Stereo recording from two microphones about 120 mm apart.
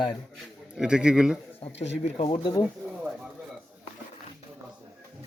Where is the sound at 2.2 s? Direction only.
45° left (ahead or behind).